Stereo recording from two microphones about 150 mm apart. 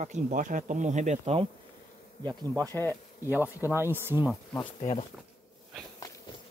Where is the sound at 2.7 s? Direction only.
15° left (ahead or behind).